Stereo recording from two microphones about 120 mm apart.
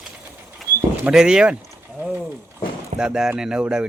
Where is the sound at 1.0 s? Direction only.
5° right (ahead or behind).